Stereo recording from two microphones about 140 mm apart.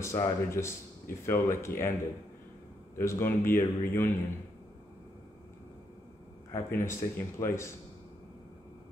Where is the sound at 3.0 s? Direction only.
20° left (ahead or behind).